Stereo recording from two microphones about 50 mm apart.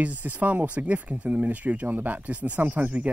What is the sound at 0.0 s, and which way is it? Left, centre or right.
Speech, right.